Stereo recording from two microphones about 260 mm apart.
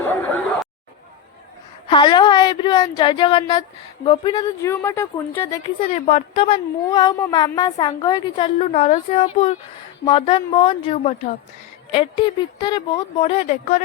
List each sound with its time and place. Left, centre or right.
1.9 s speech: centre
5.9 s speech: left